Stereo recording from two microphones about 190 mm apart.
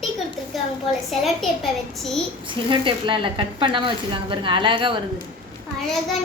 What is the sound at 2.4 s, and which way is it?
Speech, 25° right (ahead or behind).